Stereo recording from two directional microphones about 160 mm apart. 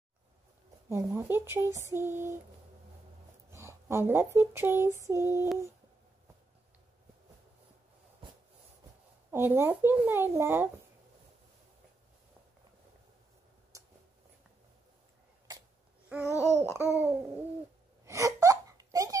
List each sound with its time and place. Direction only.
0.8 s speech: 15° right (ahead or behind)
3.4 s speech: 15° right (ahead or behind)
9.3 s speech: 15° right (ahead or behind)
16.1 s babbling: 10° right (ahead or behind)
16.4 s babbling: 45° right (ahead or behind)
16.7 s speech: 10° right (ahead or behind)
18.0 s wail: 20° right (ahead or behind)